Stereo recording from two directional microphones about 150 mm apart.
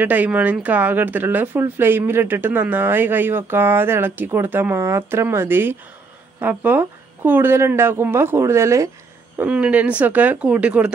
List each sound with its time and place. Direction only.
0.0 s speech: 10° right (ahead or behind)
9.4 s speech: 10° right (ahead or behind)